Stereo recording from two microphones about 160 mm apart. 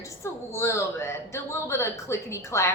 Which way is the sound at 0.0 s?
15° left (ahead or behind).